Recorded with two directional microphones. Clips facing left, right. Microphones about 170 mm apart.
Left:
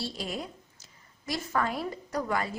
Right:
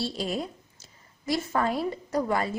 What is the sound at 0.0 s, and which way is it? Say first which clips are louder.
A woman's voice: right 5 dB; 30° right (ahead or behind).